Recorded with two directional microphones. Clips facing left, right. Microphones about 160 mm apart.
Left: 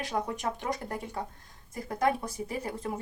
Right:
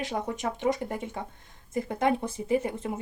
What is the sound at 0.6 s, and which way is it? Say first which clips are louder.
Speech: right 6 dB; 20° right (ahead or behind).